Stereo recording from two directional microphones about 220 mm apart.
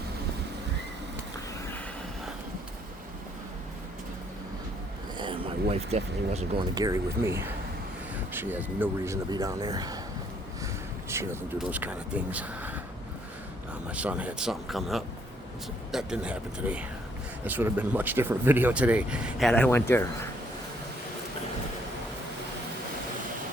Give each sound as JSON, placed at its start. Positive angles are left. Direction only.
{"t": 5.1, "sound": "speech", "side_deg": -20}
{"t": 11.1, "sound": "speech", "side_deg": -10}
{"t": 13.9, "sound": "speech", "side_deg": -5}